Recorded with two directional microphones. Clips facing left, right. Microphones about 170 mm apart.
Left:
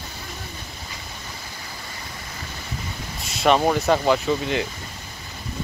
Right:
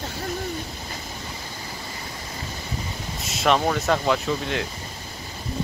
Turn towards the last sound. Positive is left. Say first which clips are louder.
# left 3 dB
turn(degrees=0)  # may be behind; listen again after turning